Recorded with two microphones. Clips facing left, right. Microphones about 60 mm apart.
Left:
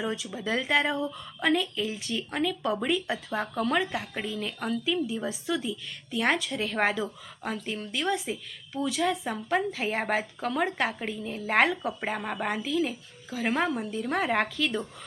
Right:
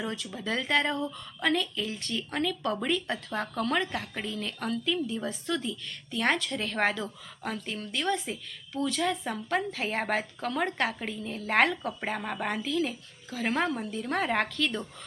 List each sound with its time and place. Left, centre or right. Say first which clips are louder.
0.0 s a woman's voice: left 3 dB; centre